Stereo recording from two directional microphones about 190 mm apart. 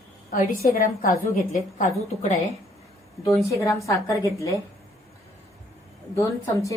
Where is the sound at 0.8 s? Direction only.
45° left (ahead or behind).